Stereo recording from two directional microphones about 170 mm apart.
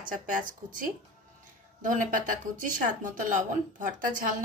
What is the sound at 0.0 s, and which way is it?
A woman's voice, 55° right (ahead or behind).